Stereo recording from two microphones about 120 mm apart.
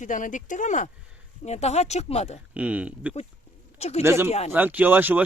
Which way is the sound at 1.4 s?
65° left (ahead or behind).